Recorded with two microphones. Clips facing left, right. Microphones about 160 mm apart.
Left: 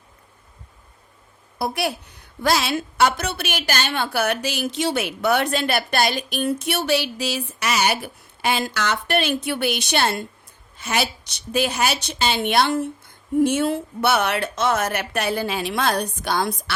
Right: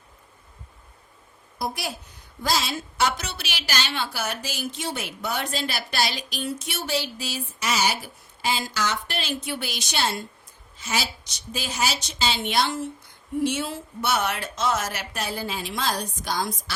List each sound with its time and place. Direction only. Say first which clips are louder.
1.5 s a woman's voice: left 6 dB; 65° left (ahead or behind)